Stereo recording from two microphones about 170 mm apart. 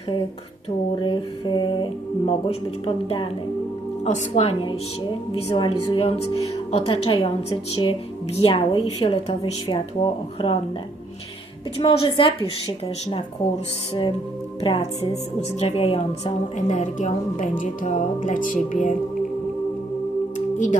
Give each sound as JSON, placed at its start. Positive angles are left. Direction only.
{"t": 0.9, "sound": "speech", "side_deg": 30}
{"t": 4.0, "sound": "speech", "side_deg": 45}
{"t": 5.3, "sound": "speech", "side_deg": 30}
{"t": 11.8, "sound": "speech", "side_deg": 30}
{"t": 14.6, "sound": "a woman's voice", "side_deg": 35}
{"t": 20.3, "sound": "music", "side_deg": 45}